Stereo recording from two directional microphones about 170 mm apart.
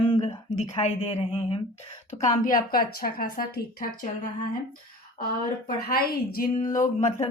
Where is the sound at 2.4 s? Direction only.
55° left (ahead or behind).